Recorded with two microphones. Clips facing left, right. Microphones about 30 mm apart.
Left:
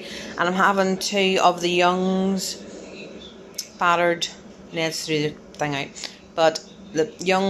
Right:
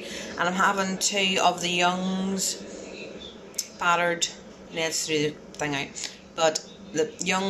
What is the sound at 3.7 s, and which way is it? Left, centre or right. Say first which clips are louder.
Speech: left 4 dB; centre.